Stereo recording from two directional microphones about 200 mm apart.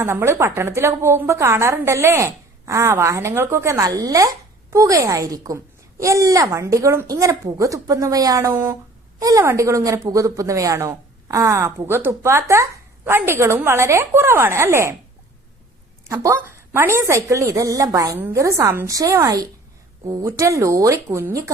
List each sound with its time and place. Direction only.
0.0 s a woman's voice: 10° right (ahead or behind)
16.0 s a woman's voice: 15° right (ahead or behind)